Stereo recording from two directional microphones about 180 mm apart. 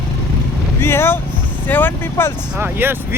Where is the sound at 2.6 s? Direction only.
10° right (ahead or behind).